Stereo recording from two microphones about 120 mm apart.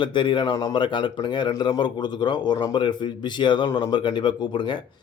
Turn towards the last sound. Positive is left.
turn(degrees=40)  # may be behind; listen again after turning